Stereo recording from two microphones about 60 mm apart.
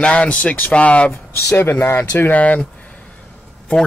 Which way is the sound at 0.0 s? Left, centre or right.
Centre.